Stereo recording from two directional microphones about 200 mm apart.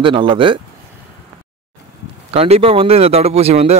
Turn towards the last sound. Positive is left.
turn(degrees=-30)  # may be behind; listen again after turning